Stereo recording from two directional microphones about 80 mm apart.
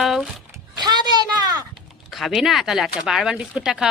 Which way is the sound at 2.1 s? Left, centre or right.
Centre.